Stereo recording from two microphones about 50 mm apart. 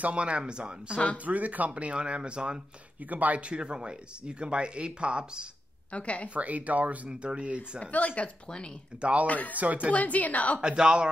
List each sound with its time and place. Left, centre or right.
0.0 s speech: right
1.1 s speech: right
3.1 s speech: right
5.9 s speech: left
6.3 s speech: right
7.8 s a woman's voice: left
9.0 s speech: right
9.3 s a woman's voice: left
10.6 s speech: centre